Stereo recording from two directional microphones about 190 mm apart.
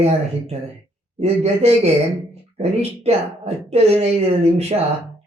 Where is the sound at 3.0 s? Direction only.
35° right (ahead or behind).